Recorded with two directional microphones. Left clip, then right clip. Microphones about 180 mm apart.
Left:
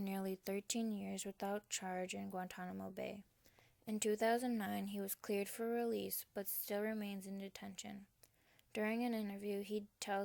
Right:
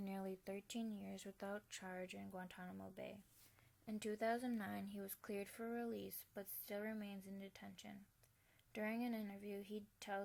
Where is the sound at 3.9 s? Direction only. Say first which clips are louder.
Left 6 dB; 35° left (ahead or behind).